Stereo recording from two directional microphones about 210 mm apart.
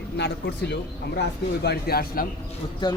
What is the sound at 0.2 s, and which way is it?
Speech, 50° left (ahead or behind).